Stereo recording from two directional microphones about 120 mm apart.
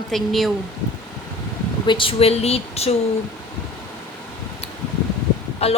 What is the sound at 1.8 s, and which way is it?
Speech, 45° left (ahead or behind).